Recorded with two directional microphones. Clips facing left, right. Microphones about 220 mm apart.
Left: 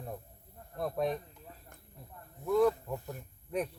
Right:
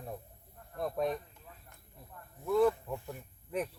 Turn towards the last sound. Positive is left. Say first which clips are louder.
# left 1 dB
turn(degrees=0)  # may be behind; listen again after turning